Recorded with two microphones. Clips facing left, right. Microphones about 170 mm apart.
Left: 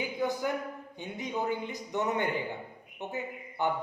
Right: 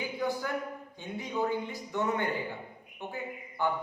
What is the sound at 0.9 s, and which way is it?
A man's voice, 20° left (ahead or behind).